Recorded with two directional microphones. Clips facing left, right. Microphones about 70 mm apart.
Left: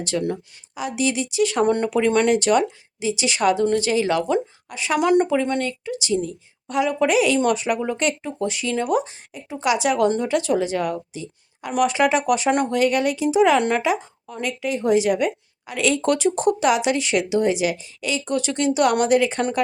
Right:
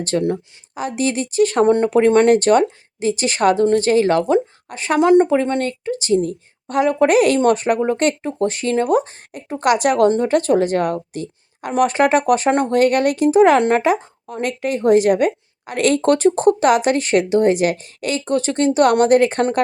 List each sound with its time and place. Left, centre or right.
0.0 s speech: right
1.7 s speech: right
4.9 s a woman's voice: right
11.7 s speech: right
12.7 s a woman's voice: right